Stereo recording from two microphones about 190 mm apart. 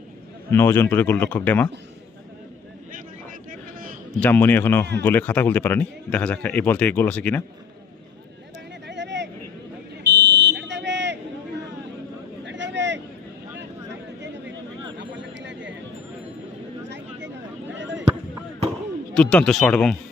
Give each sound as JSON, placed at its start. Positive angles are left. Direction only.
{"t": 0.5, "sound": "speech", "side_deg": 10}
{"t": 3.5, "sound": "a sound", "side_deg": -45}
{"t": 4.2, "sound": "speech", "side_deg": 10}
{"t": 8.9, "sound": "vehicle", "side_deg": -65}
{"t": 10.0, "sound": "buzzer", "side_deg": -60}
{"t": 12.5, "sound": "vehicle", "side_deg": -70}
{"t": 14.9, "sound": "a sound", "side_deg": -70}
{"t": 17.7, "sound": "a sound", "side_deg": -70}
{"t": 19.1, "sound": "speech", "side_deg": 5}